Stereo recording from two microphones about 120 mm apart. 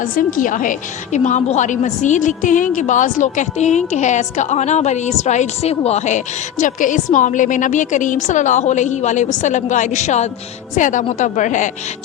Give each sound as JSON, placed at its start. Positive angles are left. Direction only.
{"t": 0.0, "sound": "a woman's voice", "side_deg": 90}
{"t": 10.8, "sound": "a woman's voice", "side_deg": 90}